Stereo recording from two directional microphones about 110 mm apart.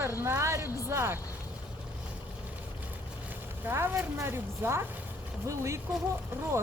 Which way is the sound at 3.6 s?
20° right (ahead or behind).